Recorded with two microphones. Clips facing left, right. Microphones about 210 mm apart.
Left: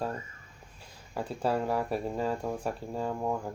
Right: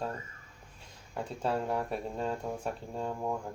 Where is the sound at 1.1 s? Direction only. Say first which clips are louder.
Left 3 dB; 5° left (ahead or behind).